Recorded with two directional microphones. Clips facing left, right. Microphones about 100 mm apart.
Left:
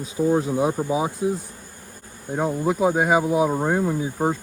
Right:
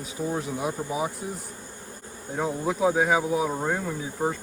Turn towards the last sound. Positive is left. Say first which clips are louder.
# left 5 dB
turn(degrees=20)  # may be behind; listen again after turning